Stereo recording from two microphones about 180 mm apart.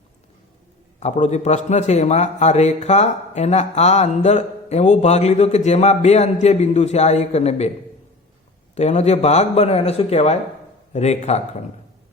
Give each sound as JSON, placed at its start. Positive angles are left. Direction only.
{"t": 0.9, "sound": "a man's voice", "side_deg": 40}
{"t": 8.7, "sound": "a man's voice", "side_deg": 40}